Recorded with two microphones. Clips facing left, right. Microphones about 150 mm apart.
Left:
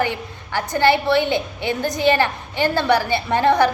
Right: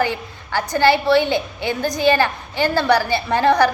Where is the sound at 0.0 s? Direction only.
20° left (ahead or behind).